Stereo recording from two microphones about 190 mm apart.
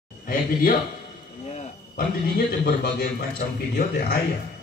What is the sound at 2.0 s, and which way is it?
A man's voice, 55° left (ahead or behind).